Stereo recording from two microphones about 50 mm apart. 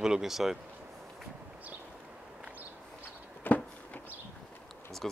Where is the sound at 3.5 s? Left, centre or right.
Left.